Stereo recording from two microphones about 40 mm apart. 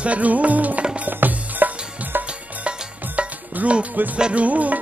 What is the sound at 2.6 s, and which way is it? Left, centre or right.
Music, right.